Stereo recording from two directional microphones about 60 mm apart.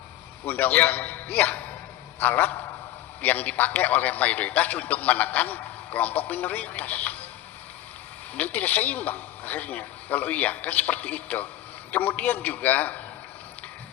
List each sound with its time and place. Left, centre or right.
0.4 s a man's voice: left
8.4 s a man's voice: left